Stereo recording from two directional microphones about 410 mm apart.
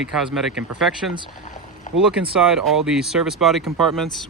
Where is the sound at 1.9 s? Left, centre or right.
Centre.